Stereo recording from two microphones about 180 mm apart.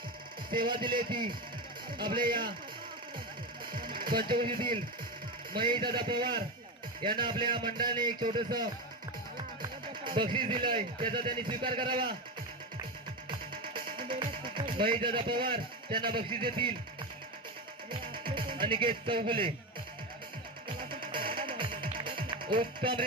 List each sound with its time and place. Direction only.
0.7 s speech: 25° right (ahead or behind)
3.8 s music: 55° right (ahead or behind)
5.5 s speech: 25° right (ahead or behind)
9.6 s music: 25° right (ahead or behind)
11.1 s speech: 25° right (ahead or behind)
13.5 s music: 25° right (ahead or behind)
14.1 s speech: 25° right (ahead or behind)
18.1 s music: 25° right (ahead or behind)
20.7 s music: 25° right (ahead or behind)